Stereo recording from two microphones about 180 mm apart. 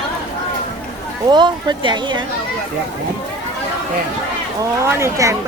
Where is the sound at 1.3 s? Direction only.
25° right (ahead or behind).